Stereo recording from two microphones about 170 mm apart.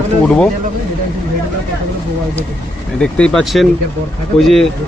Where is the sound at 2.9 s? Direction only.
5° left (ahead or behind).